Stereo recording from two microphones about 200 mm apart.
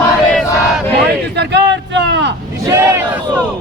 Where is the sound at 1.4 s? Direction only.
60° right (ahead or behind).